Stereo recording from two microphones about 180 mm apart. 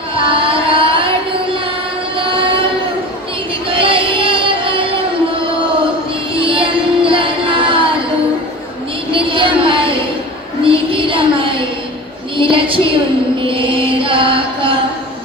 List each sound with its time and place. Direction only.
0.2 s carnatic music: 30° right (ahead or behind)
2.1 s a sound: 30° right (ahead or behind)
3.7 s music: 30° right (ahead or behind)
6.4 s music: 30° right (ahead or behind)
9.1 s a sound: 30° right (ahead or behind)
13.5 s chant: 30° right (ahead or behind)